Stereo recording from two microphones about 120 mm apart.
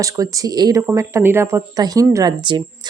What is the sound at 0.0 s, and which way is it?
Speech, 30° right (ahead or behind).